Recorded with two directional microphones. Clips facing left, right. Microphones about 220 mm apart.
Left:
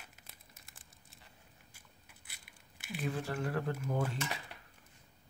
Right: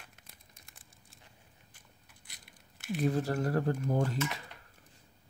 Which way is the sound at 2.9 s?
40° right (ahead or behind).